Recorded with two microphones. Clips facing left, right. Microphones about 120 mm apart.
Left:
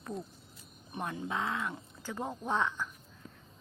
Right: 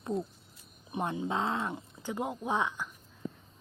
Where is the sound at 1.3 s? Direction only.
30° right (ahead or behind).